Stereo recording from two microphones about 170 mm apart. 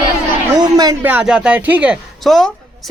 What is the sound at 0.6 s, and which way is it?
Speech, 20° right (ahead or behind).